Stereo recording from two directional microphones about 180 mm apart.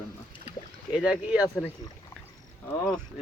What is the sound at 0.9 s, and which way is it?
Speech, 5° right (ahead or behind).